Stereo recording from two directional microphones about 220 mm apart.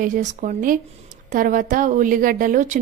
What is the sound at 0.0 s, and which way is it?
A woman's voice, 35° right (ahead or behind).